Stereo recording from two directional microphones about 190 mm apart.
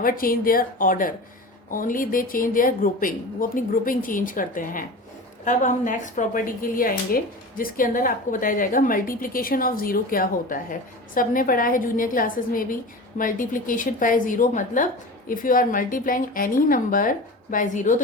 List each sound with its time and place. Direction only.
0.0 s a woman's voice: 50° left (ahead or behind)